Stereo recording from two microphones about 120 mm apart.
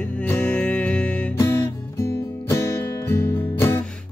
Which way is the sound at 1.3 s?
25° left (ahead or behind).